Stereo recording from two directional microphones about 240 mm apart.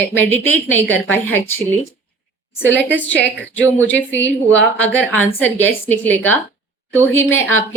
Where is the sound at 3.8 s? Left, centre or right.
Centre.